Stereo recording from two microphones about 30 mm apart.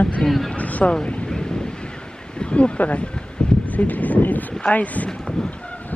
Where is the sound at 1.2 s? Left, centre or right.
Left.